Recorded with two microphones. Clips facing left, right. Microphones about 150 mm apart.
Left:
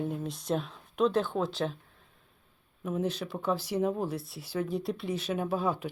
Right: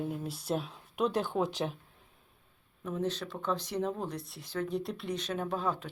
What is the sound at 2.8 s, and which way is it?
Speech, 10° left (ahead or behind).